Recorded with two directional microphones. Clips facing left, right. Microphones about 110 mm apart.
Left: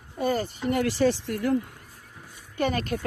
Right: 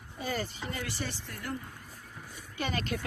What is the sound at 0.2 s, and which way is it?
Speech, 55° left (ahead or behind).